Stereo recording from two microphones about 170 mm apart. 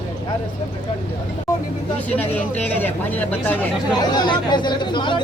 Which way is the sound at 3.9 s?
25° left (ahead or behind).